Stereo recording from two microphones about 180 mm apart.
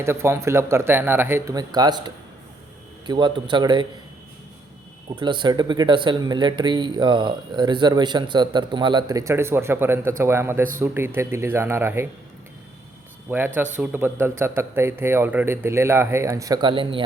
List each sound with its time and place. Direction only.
0.0 s speech: 15° right (ahead or behind)
5.2 s speech: 25° right (ahead or behind)
13.3 s speech: 15° right (ahead or behind)